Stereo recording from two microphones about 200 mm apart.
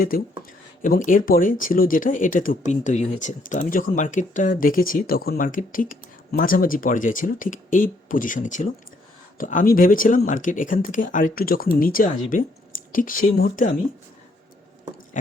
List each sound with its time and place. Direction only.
0.1 s speech: 45° left (ahead or behind)
15.1 s speech: 40° left (ahead or behind)